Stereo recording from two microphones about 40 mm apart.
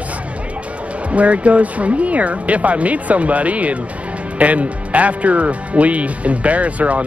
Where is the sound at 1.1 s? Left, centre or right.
Right.